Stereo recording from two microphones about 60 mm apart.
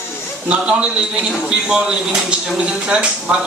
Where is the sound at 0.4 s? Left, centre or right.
Right.